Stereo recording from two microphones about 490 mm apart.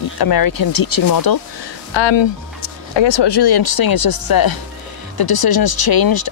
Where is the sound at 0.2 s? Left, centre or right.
Left.